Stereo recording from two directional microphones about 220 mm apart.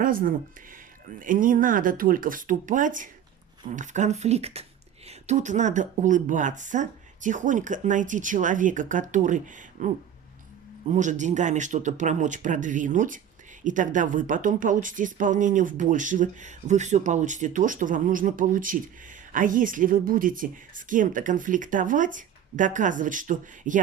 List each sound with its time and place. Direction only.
0.0 s a woman's voice: 40° right (ahead or behind)